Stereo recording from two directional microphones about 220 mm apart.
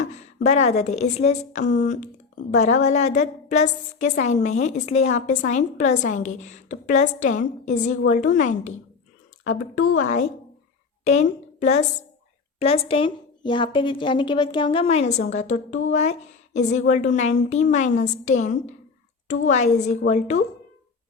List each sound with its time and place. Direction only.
0.0 s a woman's voice: 35° left (ahead or behind)
9.7 s a woman's voice: 65° left (ahead or behind)
11.0 s a woman's voice: 30° left (ahead or behind)